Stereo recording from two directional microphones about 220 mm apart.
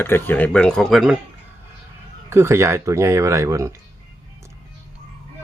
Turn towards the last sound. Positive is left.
turn(degrees=-15)  # may be behind; listen again after turning